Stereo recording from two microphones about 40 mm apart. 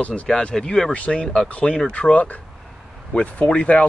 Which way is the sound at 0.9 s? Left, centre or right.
Left.